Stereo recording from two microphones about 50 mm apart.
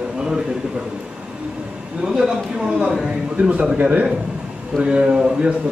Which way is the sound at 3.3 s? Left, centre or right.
Right.